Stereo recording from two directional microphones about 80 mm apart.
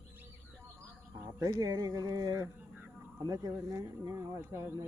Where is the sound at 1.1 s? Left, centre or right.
Right.